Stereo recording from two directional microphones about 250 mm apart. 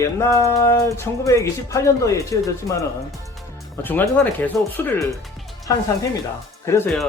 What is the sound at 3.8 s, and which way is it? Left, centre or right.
Speech, centre.